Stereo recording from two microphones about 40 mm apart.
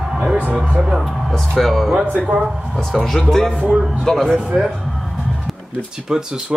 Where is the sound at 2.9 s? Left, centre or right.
Centre.